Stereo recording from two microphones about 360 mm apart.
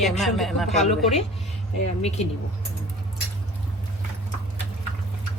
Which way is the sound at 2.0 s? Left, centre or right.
Centre.